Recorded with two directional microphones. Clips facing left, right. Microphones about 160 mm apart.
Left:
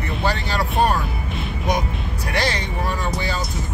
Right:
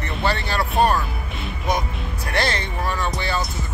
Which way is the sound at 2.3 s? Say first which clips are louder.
Even; 15° left (ahead or behind).